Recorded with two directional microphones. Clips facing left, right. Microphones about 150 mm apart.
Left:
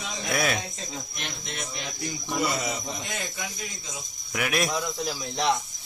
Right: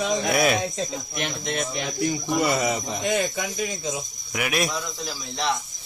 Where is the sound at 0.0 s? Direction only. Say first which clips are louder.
Right 12 dB; 75° right (ahead or behind).